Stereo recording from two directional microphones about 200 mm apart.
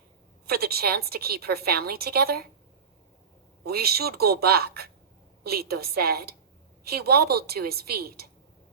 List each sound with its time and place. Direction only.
0.4 s a woman's voice: 50° right (ahead or behind)
3.6 s a woman's voice: 50° right (ahead or behind)